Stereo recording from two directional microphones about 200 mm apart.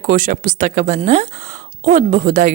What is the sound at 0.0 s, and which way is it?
Speech, 45° right (ahead or behind).